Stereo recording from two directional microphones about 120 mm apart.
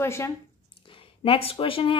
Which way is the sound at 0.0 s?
20° left (ahead or behind).